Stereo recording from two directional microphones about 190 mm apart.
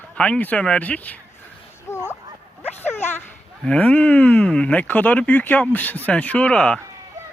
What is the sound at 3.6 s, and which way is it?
Speech, 5° left (ahead or behind).